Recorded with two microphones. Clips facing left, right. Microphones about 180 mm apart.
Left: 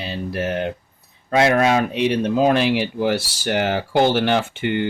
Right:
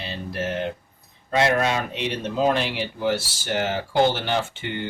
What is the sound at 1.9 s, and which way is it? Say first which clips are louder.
Speech: left 8 dB; 10° left (ahead or behind).